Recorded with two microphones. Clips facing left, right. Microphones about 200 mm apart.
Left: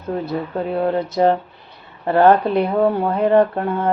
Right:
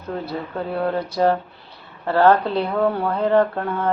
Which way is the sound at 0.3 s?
20° left (ahead or behind).